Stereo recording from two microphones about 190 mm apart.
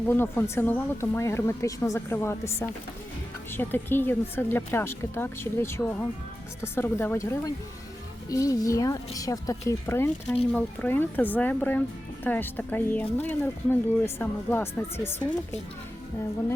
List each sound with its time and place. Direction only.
0.1 s speech: 10° left (ahead or behind)